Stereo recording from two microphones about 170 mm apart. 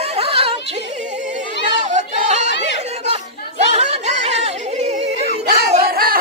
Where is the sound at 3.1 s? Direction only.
40° right (ahead or behind).